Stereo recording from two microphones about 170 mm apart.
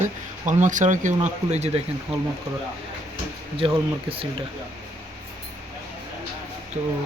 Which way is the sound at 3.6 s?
30° right (ahead or behind).